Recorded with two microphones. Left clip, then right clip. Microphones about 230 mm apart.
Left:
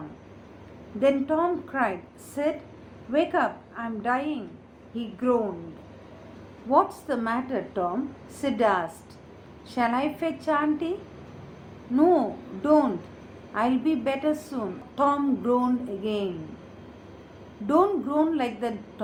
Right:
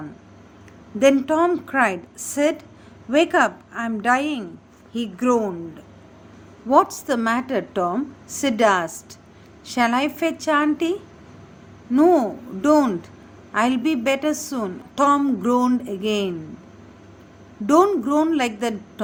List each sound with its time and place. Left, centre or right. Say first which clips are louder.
0.9 s a woman's voice: right 6 dB; right
7.1 s a woman's voice: right 6 dB; right
11.9 s a woman's voice: right 5 dB; right
17.7 s a woman's voice: right 6 dB; right